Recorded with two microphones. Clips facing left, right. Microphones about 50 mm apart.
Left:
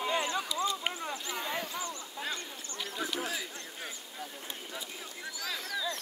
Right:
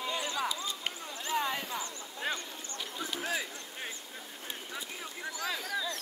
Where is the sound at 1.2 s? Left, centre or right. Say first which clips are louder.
Right 6 dB; right.